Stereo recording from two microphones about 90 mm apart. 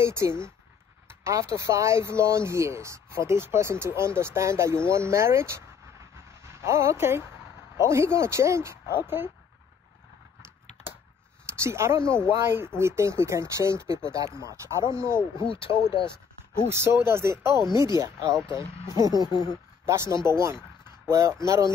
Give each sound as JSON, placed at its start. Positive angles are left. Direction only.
{"t": 0.0, "sound": "speech", "side_deg": -30}
{"t": 6.7, "sound": "speech", "side_deg": -30}
{"t": 11.4, "sound": "speech", "side_deg": -30}
{"t": 15.3, "sound": "speech", "side_deg": 75}
{"t": 16.6, "sound": "speech", "side_deg": -30}
{"t": 19.0, "sound": "speech", "side_deg": 50}
{"t": 19.9, "sound": "speech", "side_deg": -35}